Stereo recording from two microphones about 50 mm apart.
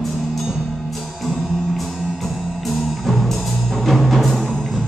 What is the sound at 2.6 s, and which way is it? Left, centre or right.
Music, centre.